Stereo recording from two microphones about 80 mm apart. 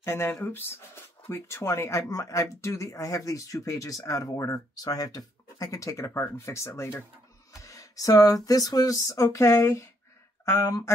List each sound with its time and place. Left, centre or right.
0.0 s speech: left
7.5 s a sound: left
8.5 s speech: left